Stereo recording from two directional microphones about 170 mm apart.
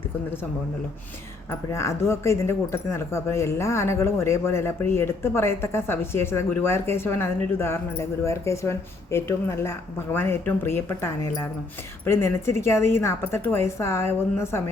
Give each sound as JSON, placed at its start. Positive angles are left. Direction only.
{"t": 1.5, "sound": "speech", "side_deg": 15}